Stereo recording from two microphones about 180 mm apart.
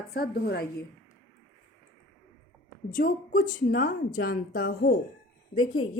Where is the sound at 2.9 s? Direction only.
50° left (ahead or behind).